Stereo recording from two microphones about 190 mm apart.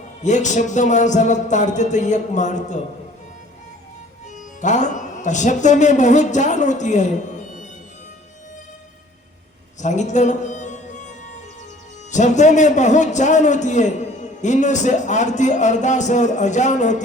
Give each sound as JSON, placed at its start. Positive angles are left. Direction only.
{"t": 0.2, "sound": "a man's voice", "side_deg": 40}
{"t": 4.6, "sound": "a man's voice", "side_deg": 40}
{"t": 9.8, "sound": "music", "side_deg": 40}
{"t": 12.1, "sound": "a man's voice", "side_deg": 40}